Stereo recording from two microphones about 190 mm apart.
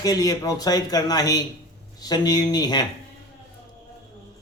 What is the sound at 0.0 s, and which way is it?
Speech, 20° left (ahead or behind).